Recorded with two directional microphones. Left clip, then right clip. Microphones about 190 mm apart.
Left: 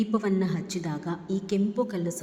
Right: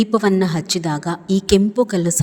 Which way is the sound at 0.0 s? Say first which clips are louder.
Right 11 dB; 40° right (ahead or behind).